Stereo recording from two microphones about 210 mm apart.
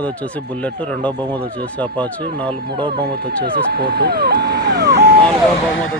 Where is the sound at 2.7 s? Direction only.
25° right (ahead or behind).